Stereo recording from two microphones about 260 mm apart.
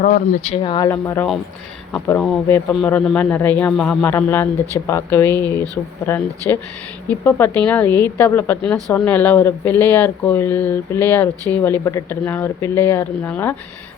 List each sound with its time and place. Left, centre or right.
0.0 s a man's voice: left; by 13.6 s centre